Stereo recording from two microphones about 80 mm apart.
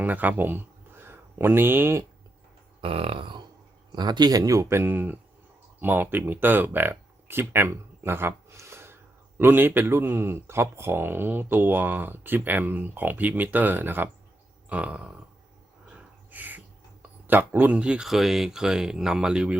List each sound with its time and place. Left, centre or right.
0.0 s speech: right
3.2 s a sound: right
3.9 s speech: right
8.4 s a sound: right
9.4 s speech: right
14.7 s speech: centre
15.9 s a sound: centre
17.2 s speech: right
17.7 s speech: centre